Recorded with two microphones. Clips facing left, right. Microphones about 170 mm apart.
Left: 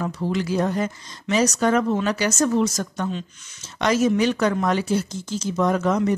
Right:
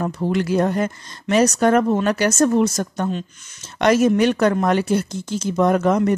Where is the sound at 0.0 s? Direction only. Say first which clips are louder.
Right 3 dB; 55° right (ahead or behind).